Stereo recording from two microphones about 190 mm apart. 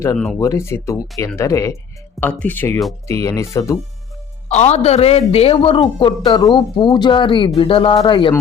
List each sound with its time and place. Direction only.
0.3 s speech: 15° left (ahead or behind)
4.4 s a man's voice: 35° left (ahead or behind)